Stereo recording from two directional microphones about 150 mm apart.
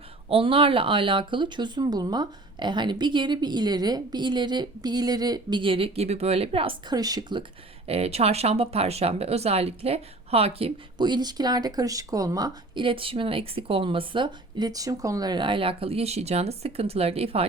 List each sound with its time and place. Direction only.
0.3 s speech: 35° right (ahead or behind)
7.9 s speech: 45° right (ahead or behind)